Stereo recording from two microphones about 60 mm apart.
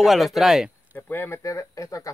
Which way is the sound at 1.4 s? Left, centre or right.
Left.